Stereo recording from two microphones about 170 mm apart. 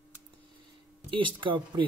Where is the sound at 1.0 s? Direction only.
30° right (ahead or behind).